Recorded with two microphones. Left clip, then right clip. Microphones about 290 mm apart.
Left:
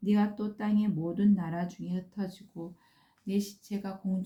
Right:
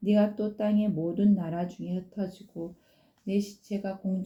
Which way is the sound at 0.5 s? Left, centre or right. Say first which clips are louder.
Right 4 dB; centre.